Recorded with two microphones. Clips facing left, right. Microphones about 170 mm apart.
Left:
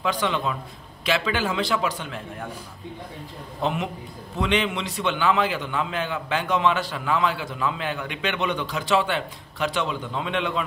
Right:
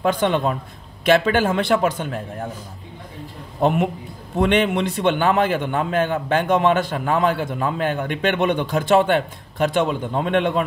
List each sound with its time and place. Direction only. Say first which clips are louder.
0.0 s a man's voice: right 6 dB; 50° right (ahead or behind)
3.6 s a man's voice: right 8 dB; 50° right (ahead or behind)